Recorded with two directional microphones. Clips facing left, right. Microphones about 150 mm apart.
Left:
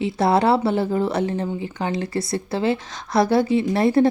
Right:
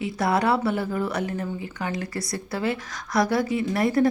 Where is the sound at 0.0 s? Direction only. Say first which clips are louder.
Left 5 dB; 30° left (ahead or behind).